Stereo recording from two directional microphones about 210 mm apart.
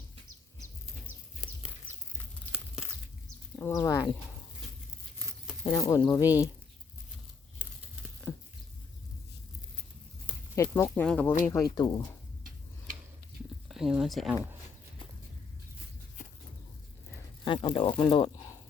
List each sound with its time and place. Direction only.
3.5 s speech: 10° left (ahead or behind)
5.6 s speech: 15° left (ahead or behind)
10.5 s speech: 15° left (ahead or behind)
13.7 s speech: centre (ahead or behind)
17.4 s speech: 25° left (ahead or behind)